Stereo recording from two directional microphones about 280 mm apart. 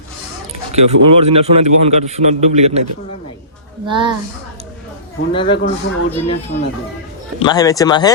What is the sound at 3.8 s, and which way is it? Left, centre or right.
Speech, centre.